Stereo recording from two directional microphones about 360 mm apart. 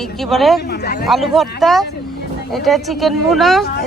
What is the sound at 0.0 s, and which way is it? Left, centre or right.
Speech, centre.